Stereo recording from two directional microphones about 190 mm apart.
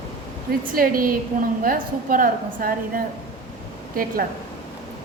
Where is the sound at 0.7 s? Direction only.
50° right (ahead or behind).